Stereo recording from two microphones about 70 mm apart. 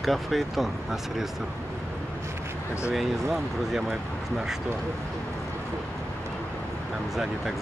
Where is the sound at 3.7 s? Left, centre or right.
Centre.